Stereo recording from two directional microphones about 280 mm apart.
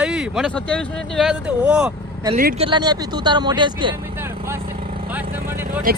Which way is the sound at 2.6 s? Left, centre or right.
Centre.